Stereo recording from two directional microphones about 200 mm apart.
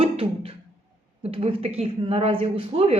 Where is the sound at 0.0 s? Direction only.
30° right (ahead or behind).